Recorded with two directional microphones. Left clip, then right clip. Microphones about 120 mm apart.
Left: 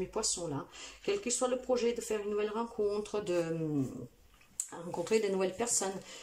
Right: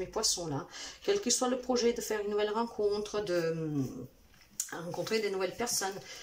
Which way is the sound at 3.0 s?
20° left (ahead or behind).